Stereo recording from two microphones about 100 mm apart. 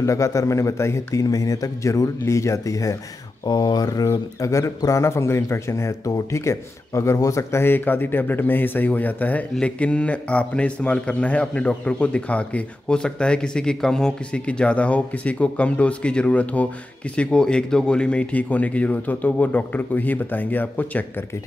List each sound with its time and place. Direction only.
0.0 s speech: 30° left (ahead or behind)
3.4 s speech: 45° left (ahead or behind); by 21.0 s 15° left (ahead or behind)